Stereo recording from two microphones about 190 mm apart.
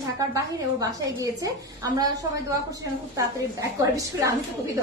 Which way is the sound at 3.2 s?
15° right (ahead or behind).